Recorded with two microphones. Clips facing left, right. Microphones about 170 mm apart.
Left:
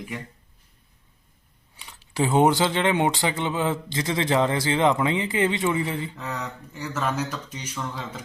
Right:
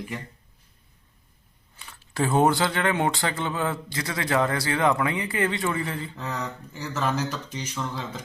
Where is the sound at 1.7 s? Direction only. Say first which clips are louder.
Left 2 dB; 15° left (ahead or behind).